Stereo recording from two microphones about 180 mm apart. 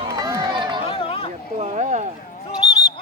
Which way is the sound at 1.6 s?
40° right (ahead or behind).